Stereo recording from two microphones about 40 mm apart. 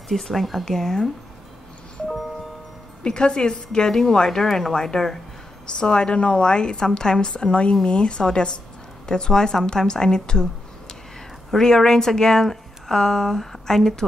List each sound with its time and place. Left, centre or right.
0.1 s speech: centre
3.0 s a woman's voice: left
5.8 s a woman's voice: left
11.5 s a woman's voice: centre